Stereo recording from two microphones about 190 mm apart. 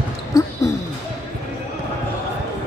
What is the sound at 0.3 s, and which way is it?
Basketball bounce, 15° left (ahead or behind).